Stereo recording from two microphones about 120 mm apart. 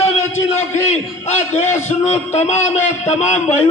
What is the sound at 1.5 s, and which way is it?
A man's voice, 75° left (ahead or behind).